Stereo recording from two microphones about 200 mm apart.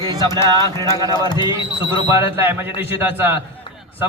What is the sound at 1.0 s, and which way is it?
Speech, 20° left (ahead or behind).